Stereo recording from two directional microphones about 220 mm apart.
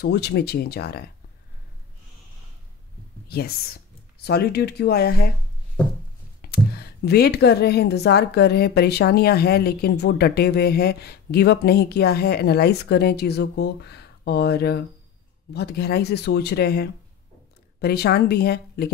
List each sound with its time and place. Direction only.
0.0 s speech: 50° left (ahead or behind)
3.3 s speech: 45° left (ahead or behind)
6.4 s speech: 45° left (ahead or behind)